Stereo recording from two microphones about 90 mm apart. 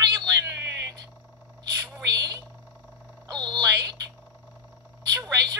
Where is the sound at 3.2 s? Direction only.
50° right (ahead or behind).